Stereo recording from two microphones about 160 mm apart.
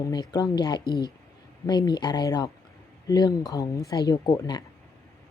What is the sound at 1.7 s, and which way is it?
Speech, 25° left (ahead or behind).